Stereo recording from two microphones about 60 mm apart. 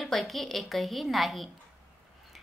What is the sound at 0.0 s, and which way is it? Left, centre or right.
Speech, centre.